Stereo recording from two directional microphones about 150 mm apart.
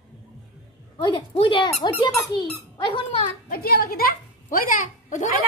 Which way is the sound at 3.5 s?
90° left.